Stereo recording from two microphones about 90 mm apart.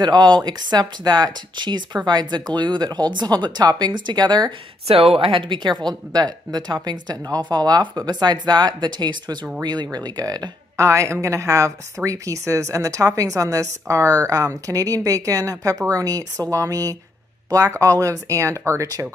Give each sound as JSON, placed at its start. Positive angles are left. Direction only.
{"t": 0.0, "sound": "speech", "side_deg": -55}
{"t": 4.8, "sound": "speech", "side_deg": -90}